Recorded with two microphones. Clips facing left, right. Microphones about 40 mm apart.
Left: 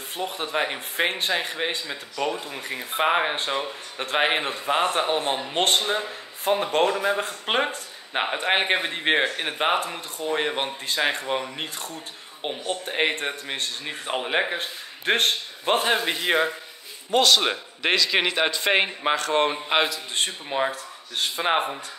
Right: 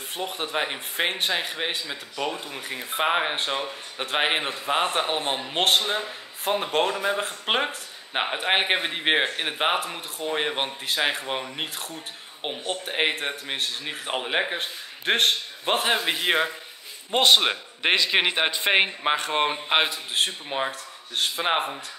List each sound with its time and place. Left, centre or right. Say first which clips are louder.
0.2 s speech: left 2 dB; centre
17.1 s a man's voice: even; right
17.4 s speech: even; centre
17.9 s a man's voice: even; right
20.2 s speech: left 1 dB; centre